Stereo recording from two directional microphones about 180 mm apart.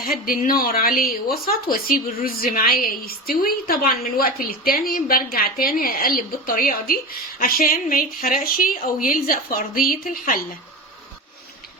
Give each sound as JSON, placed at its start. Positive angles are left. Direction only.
{"t": 0.0, "sound": "a woman's voice", "side_deg": 55}